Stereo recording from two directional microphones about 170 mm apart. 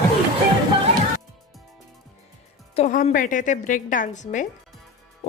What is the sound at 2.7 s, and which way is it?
A woman's voice, 45° left (ahead or behind).